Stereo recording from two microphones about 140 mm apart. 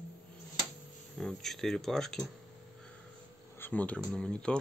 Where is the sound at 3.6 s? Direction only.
10° left (ahead or behind).